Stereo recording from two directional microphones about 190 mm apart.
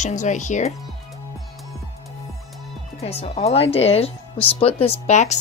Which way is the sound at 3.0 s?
35° left (ahead or behind).